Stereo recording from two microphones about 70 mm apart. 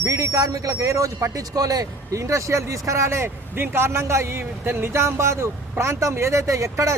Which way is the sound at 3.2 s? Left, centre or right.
Right.